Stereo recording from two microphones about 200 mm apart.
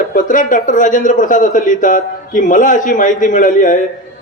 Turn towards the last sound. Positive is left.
turn(degrees=40)  # may be behind; listen again after turning